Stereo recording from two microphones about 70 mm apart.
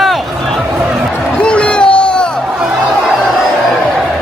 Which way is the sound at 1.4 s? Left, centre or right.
Centre.